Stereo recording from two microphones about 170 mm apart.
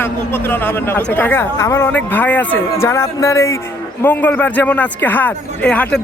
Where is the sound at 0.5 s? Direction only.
10° left (ahead or behind).